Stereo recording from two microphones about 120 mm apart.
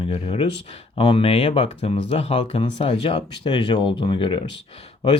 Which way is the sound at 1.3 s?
55° left (ahead or behind).